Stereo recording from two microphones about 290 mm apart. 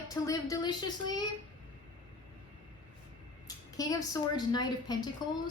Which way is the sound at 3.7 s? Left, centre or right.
Centre.